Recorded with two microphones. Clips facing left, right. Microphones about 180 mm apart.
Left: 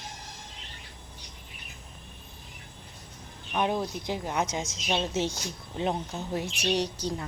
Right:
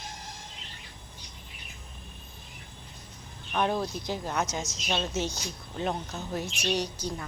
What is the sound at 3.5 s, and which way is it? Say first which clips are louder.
A woman's voice: even; 10° left (ahead or behind).